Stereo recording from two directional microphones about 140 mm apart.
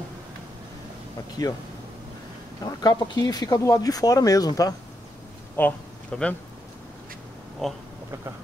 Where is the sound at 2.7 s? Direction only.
30° left (ahead or behind).